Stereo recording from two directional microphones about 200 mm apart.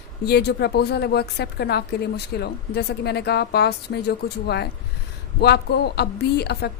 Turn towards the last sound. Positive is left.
turn(degrees=55)  # may be behind; listen again after turning